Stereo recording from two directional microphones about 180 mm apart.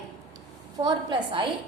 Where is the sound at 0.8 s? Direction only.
25° right (ahead or behind).